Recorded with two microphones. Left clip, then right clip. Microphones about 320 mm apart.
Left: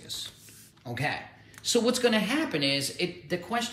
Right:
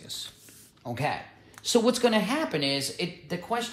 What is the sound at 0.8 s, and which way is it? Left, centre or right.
Speech, centre.